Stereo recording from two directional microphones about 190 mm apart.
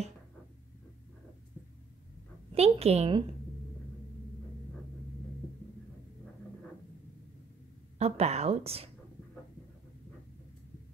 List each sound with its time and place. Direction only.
2.5 s a woman's voice: 30° right (ahead or behind)
8.0 s a woman's voice: 35° right (ahead or behind)